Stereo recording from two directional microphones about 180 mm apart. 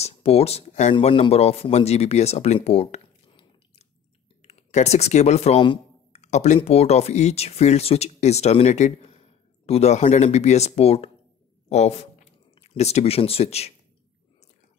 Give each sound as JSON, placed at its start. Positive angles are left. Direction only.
{"t": 0.0, "sound": "speech", "side_deg": 35}